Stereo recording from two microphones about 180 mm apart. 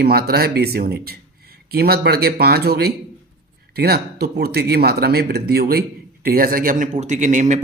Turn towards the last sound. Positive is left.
turn(degrees=-45)  # may be behind; listen again after turning